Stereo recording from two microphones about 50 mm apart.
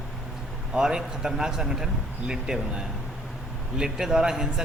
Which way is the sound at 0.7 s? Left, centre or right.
Centre.